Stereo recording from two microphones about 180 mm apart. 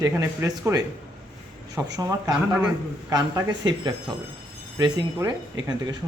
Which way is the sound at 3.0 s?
20° right (ahead or behind).